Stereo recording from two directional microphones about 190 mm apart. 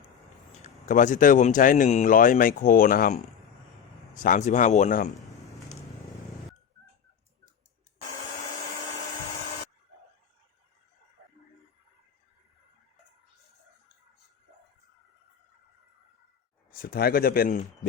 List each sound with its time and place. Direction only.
0.9 s speech: 40° left (ahead or behind)
16.7 s speech: 50° left (ahead or behind)